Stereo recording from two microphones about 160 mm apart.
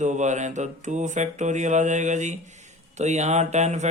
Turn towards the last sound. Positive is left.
turn(degrees=-45)  # may be behind; listen again after turning